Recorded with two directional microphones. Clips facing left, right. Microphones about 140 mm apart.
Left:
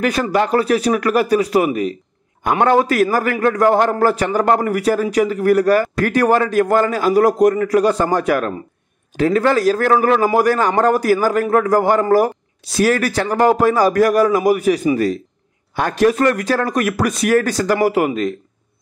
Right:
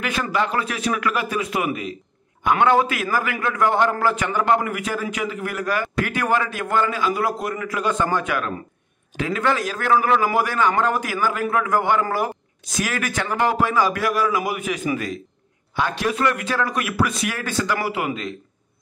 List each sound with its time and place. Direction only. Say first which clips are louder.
0.0 s a man's voice: left 6 dB; 40° left (ahead or behind)